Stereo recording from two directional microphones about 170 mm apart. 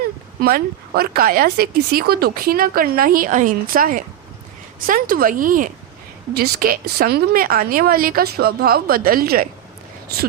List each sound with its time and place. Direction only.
0.4 s speech: 60° right (ahead or behind)
6.3 s speech: 60° right (ahead or behind)